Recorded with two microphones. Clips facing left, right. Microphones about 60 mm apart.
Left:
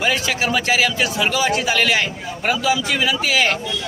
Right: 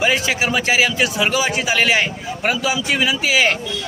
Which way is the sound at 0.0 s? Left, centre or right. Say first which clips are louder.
Right 2 dB; centre.